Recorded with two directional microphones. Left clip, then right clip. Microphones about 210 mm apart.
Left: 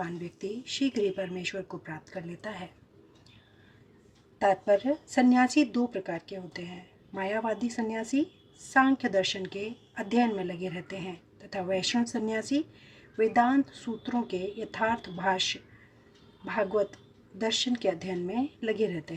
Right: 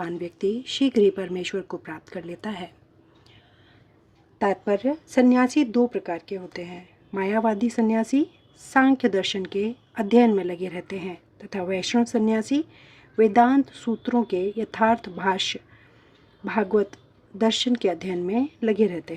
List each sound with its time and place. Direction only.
0.8 s speech: 45° right (ahead or behind)
4.4 s speech: 45° right (ahead or behind)
16.5 s speech: 45° right (ahead or behind)